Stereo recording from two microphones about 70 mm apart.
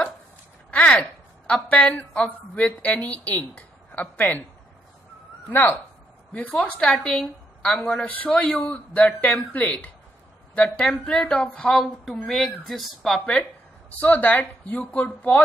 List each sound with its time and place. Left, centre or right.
0.7 s a sound: centre
1.5 s a woman's voice: left
5.5 s a woman's voice: left
6.5 s a woman's voice: centre
11.7 s speech: centre
13.2 s speech: centre